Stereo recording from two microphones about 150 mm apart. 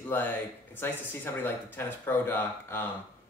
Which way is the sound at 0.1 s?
15° left (ahead or behind).